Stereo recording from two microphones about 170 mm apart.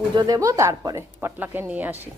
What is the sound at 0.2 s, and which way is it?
Speech, 20° right (ahead or behind).